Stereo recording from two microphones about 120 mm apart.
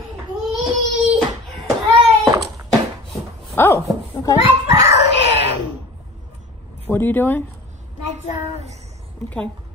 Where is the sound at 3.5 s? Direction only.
20° left (ahead or behind).